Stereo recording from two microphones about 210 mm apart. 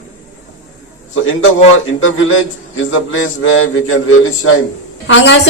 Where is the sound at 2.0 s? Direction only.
70° left (ahead or behind).